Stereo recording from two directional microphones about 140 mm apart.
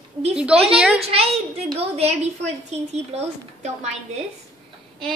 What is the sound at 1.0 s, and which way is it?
A woman's voice, 45° right (ahead or behind).